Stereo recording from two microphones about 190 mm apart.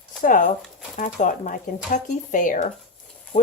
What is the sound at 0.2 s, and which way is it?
Speech, 45° left (ahead or behind).